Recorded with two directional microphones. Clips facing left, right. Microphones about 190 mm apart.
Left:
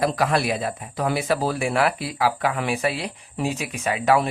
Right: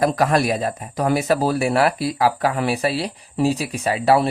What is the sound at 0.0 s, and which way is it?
Speech, 45° right (ahead or behind).